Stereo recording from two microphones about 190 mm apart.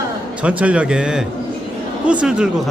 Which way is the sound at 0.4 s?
5° right (ahead or behind).